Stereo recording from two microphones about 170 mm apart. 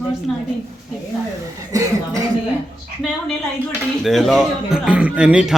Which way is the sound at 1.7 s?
20° right (ahead or behind).